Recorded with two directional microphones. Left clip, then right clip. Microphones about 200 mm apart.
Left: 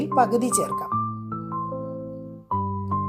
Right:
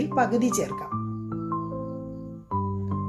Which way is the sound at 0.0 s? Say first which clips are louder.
Left 3 dB; 25° left (ahead or behind).